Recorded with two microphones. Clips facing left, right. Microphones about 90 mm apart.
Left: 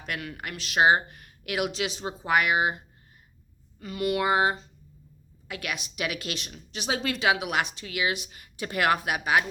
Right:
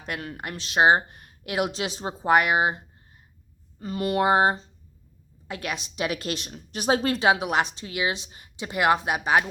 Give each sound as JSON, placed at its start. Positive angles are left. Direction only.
{"t": 0.0, "sound": "speech", "side_deg": -30}